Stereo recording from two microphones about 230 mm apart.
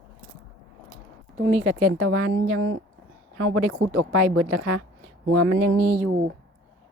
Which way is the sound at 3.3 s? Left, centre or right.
Right.